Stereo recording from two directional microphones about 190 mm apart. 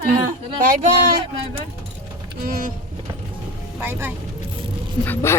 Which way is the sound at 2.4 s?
50° right (ahead or behind).